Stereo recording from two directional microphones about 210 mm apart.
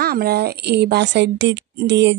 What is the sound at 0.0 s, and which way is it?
A woman's voice, 50° right (ahead or behind).